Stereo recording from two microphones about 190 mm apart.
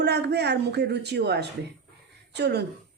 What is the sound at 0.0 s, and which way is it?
A woman's voice, 60° right (ahead or behind).